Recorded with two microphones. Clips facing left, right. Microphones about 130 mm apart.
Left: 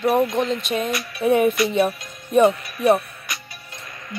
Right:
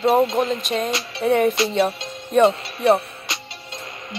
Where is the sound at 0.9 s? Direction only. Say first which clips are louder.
Even; 25° right (ahead or behind).